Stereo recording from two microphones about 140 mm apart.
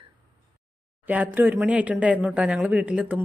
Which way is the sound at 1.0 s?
10° right (ahead or behind).